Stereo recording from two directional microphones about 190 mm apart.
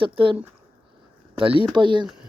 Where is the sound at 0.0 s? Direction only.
25° right (ahead or behind).